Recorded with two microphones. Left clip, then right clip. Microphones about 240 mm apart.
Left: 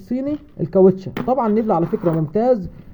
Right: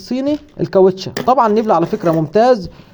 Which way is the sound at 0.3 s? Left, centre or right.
Right.